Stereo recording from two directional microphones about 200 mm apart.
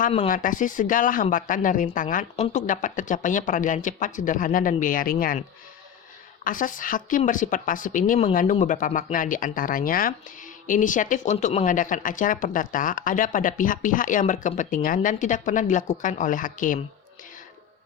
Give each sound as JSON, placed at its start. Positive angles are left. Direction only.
{"t": 0.3, "sound": "speech", "side_deg": 40}
{"t": 6.4, "sound": "speech", "side_deg": 40}